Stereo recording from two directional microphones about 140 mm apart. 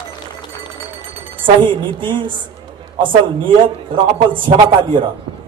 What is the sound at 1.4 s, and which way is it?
Speech, 35° right (ahead or behind).